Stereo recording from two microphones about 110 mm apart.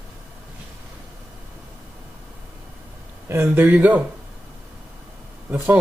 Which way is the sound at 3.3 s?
20° right (ahead or behind).